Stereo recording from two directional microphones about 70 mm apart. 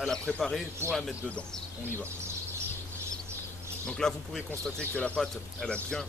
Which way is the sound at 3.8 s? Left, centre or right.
Centre.